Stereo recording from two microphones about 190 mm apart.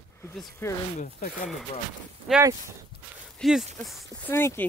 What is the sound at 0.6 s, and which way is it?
Speech, 10° left (ahead or behind).